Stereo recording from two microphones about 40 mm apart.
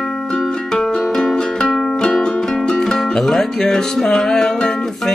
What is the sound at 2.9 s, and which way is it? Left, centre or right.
Music, centre.